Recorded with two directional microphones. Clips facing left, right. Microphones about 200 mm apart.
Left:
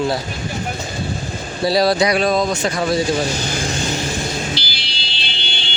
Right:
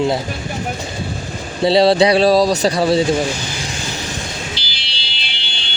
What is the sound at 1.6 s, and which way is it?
Speech, 25° right (ahead or behind).